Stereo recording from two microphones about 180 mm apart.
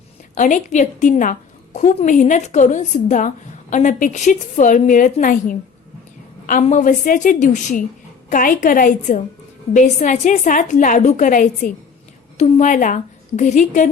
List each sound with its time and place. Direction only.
0.3 s a woman's voice: 40° left (ahead or behind)